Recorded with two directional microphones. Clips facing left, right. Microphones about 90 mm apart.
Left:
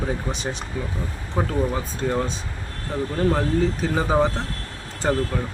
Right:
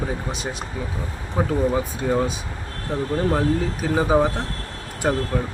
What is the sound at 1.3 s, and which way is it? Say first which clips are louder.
Speech: right 3 dB; 15° right (ahead or behind).